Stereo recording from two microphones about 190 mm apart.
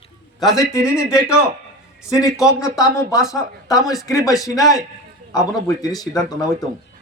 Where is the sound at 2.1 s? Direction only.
15° left (ahead or behind).